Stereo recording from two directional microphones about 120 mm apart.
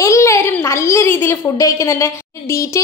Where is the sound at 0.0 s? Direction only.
25° left (ahead or behind).